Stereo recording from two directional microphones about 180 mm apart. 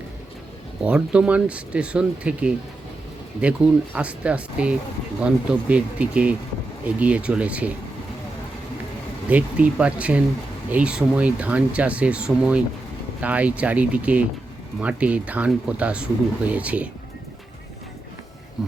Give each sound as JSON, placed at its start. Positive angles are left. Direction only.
{"t": 0.9, "sound": "speech", "side_deg": -5}
{"t": 9.3, "sound": "speech", "side_deg": -5}